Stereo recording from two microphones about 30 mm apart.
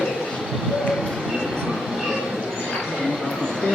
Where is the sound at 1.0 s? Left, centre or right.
Centre.